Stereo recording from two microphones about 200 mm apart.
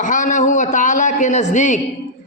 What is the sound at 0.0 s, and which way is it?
A man's voice, 40° left (ahead or behind).